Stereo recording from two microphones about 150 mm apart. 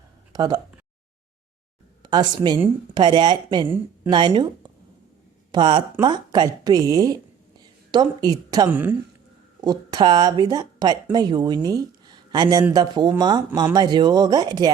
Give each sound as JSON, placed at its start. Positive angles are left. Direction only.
{"t": 0.3, "sound": "speech", "side_deg": -30}
{"t": 2.0, "sound": "a woman's voice", "side_deg": -30}
{"t": 5.5, "sound": "speech", "side_deg": -30}
{"t": 8.7, "sound": "a woman's voice", "side_deg": -15}
{"t": 9.6, "sound": "a woman's voice", "side_deg": -30}